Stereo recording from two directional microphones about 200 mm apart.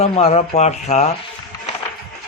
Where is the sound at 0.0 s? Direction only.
30° left (ahead or behind).